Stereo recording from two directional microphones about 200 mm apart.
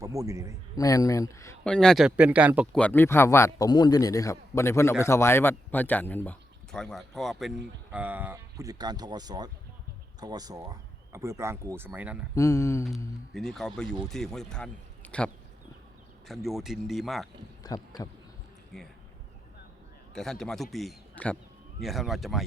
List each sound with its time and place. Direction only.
0.0 s speech: 15° right (ahead or behind)
0.8 s a man's voice: 15° left (ahead or behind)
1.7 s speech: 5° left (ahead or behind)
2.7 s a man's voice: 10° left (ahead or behind)
12.3 s a man's voice: 15° left (ahead or behind)
13.3 s speech: centre (ahead or behind)
17.6 s a sound: 20° left (ahead or behind)
18.7 s speech: centre (ahead or behind)
20.1 s speech: centre (ahead or behind)